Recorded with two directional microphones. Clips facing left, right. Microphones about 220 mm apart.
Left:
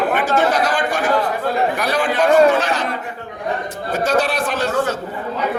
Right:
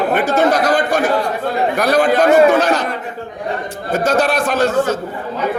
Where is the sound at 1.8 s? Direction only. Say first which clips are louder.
Right 5 dB; 40° right (ahead or behind).